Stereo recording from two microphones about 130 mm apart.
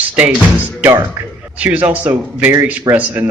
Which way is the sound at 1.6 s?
10° right (ahead or behind).